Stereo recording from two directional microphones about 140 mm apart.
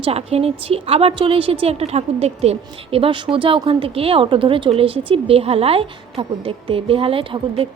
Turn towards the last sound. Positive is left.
turn(degrees=-40)  # may be behind; listen again after turning